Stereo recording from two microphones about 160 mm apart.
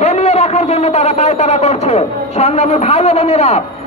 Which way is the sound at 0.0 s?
40° left (ahead or behind).